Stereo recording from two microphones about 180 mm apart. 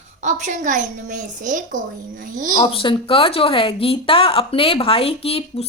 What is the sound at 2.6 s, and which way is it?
Speech, 30° left (ahead or behind).